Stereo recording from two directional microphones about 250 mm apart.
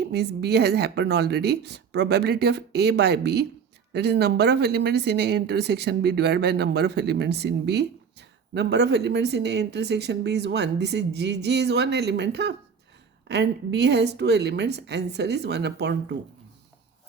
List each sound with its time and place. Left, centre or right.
0.0 s speech: right